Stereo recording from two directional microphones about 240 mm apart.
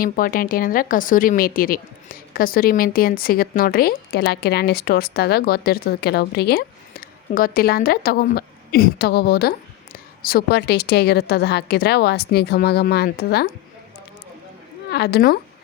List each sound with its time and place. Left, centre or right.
0.0 s a woman's voice: left
14.8 s a woman's voice: left